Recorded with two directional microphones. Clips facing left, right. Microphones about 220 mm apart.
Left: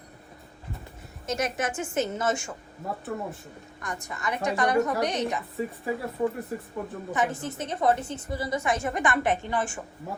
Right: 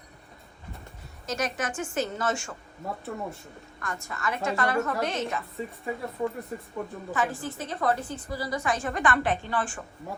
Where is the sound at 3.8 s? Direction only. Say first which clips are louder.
Even; 15° left (ahead or behind).